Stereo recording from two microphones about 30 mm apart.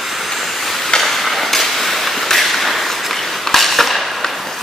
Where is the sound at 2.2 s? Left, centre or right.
Centre.